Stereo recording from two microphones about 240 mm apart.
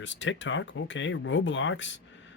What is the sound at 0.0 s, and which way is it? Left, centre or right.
Speech, left.